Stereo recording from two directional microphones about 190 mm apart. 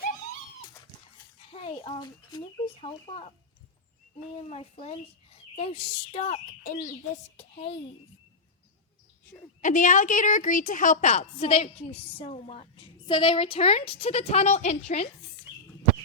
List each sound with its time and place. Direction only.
1.5 s speech: 30° left (ahead or behind)
4.4 s a woman's voice: 35° left (ahead or behind)
9.6 s a woman's voice: 40° left (ahead or behind)